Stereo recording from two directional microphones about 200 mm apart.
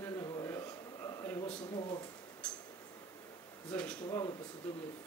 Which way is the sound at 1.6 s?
25° left (ahead or behind).